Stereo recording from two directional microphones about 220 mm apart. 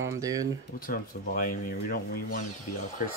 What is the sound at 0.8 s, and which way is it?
Speech, 40° left (ahead or behind).